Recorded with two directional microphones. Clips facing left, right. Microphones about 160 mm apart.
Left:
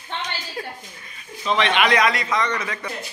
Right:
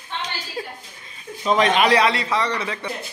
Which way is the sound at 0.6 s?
10° right (ahead or behind).